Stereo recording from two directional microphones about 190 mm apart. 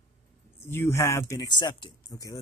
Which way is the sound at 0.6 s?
10° left (ahead or behind).